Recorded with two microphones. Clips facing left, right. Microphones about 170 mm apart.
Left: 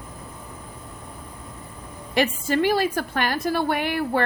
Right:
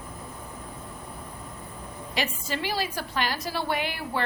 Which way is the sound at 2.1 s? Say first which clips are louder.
Left 9 dB; 50° left (ahead or behind).